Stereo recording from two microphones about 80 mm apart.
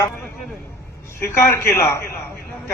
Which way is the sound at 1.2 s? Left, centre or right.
Left.